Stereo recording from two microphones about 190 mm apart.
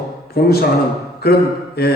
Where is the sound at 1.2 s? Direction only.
55° left (ahead or behind).